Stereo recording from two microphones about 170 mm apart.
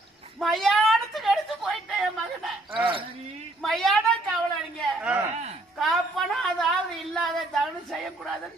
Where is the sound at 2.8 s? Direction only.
30° right (ahead or behind).